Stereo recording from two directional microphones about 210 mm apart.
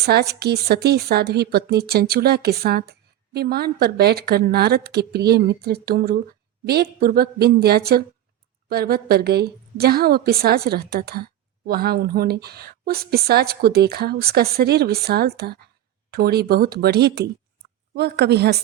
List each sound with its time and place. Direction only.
0.0 s a woman's voice: 50° right (ahead or behind)